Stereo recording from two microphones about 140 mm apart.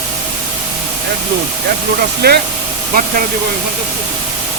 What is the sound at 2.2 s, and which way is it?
Speech, 90° right.